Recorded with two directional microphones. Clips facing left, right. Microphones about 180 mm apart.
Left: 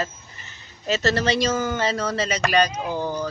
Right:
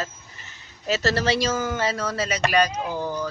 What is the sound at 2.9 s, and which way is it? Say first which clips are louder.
Speech: left 2 dB; 30° left (ahead or behind).